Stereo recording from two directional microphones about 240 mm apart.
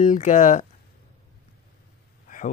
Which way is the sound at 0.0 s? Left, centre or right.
Left.